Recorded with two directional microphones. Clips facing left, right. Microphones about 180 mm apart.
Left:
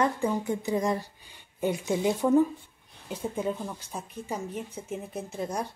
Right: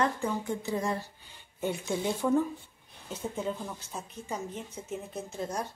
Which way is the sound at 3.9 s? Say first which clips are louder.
Left 2 dB; 10° left (ahead or behind).